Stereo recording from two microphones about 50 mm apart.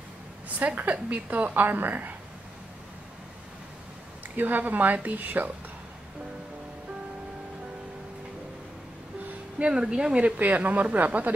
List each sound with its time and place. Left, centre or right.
0.6 s a woman's voice: right
1.1 s speech: right
4.4 s speech: right
9.6 s a woman's voice: centre